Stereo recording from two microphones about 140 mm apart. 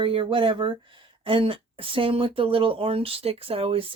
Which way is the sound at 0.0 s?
40° right (ahead or behind).